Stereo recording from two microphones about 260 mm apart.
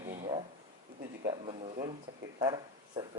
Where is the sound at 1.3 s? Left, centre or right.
Right.